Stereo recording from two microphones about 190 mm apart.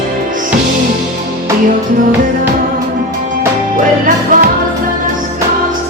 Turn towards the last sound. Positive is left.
turn(degrees=-45)  # may be behind; listen again after turning